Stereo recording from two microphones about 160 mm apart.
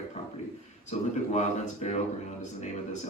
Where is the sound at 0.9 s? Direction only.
45° left (ahead or behind).